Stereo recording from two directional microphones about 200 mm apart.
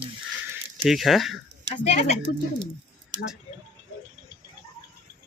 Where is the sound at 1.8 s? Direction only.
35° left (ahead or behind).